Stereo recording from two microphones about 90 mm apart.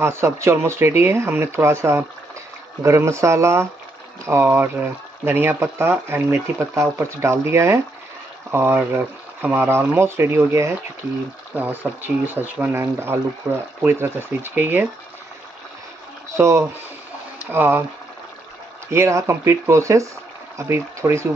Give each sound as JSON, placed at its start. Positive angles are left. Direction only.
{"t": 0.0, "sound": "speech", "side_deg": -30}
{"t": 16.3, "sound": "speech", "side_deg": -35}
{"t": 17.5, "sound": "speech", "side_deg": -20}
{"t": 18.9, "sound": "speech", "side_deg": -30}